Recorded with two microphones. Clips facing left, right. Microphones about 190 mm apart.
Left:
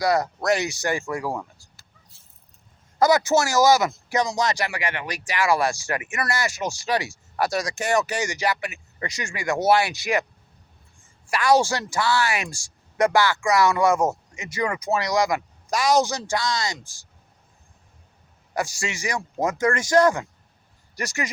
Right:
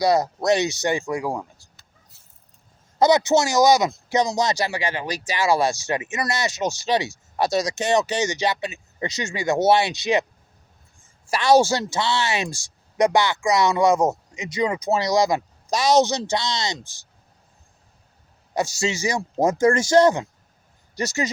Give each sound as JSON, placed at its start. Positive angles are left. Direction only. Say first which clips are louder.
{"t": 0.0, "sound": "speech", "louder": "right 3 dB", "side_deg": -20}
{"t": 2.1, "sound": "vehicle", "louder": "even", "side_deg": 30}
{"t": 3.0, "sound": "speech", "louder": "right 2 dB", "side_deg": -20}
{"t": 11.3, "sound": "speech", "louder": "right 3 dB", "side_deg": -25}
{"t": 18.5, "sound": "speech", "louder": "right 4 dB", "side_deg": -25}